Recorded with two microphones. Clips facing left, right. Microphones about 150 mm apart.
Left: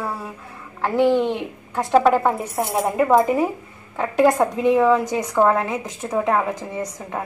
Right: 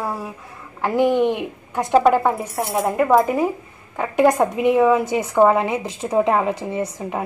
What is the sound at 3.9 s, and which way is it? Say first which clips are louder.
A woman's voice: even; 5° right (ahead or behind).